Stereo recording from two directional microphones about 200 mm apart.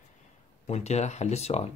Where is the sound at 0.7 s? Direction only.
35° left (ahead or behind).